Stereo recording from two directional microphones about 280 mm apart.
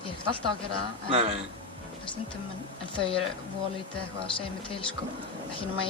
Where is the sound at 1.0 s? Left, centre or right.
Right.